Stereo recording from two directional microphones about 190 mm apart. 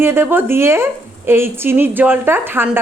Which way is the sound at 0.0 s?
10° right (ahead or behind).